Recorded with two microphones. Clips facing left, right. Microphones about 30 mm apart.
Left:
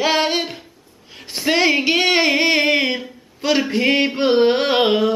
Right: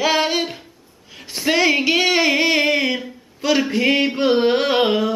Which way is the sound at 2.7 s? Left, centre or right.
Centre.